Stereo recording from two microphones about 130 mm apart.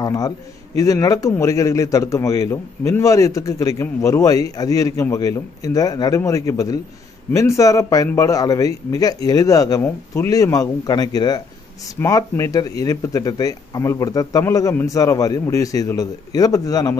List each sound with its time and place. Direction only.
0.0 s a man's voice: 30° left (ahead or behind)